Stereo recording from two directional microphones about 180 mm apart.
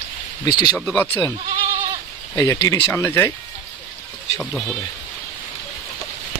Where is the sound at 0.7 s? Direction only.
5° left (ahead or behind).